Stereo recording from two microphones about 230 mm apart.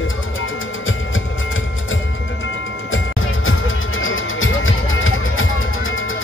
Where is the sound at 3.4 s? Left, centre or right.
Left.